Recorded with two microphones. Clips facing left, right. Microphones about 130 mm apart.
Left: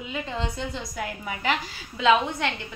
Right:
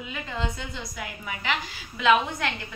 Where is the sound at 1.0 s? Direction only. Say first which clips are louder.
Left 4 dB; 40° left (ahead or behind).